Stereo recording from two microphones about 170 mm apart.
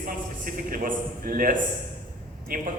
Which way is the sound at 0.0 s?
55° right (ahead or behind).